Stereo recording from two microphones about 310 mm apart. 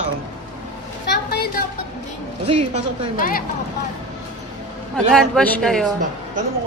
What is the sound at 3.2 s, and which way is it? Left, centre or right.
Speech, left.